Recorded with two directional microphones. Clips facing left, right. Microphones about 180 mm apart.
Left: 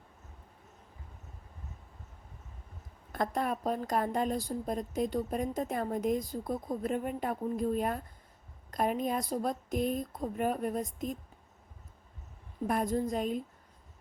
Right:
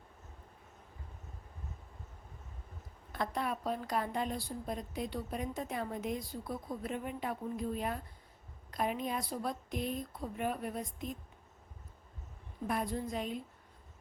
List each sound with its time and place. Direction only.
3.1 s a woman's voice: 45° left (ahead or behind)
12.6 s a woman's voice: 45° left (ahead or behind)